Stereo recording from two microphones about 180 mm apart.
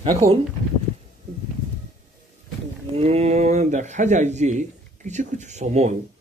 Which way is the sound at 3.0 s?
35° right (ahead or behind).